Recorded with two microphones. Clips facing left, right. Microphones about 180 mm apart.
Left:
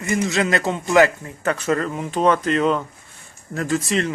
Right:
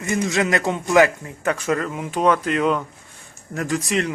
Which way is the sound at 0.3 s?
20° right (ahead or behind).